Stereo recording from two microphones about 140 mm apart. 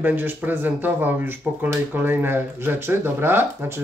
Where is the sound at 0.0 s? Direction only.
15° right (ahead or behind).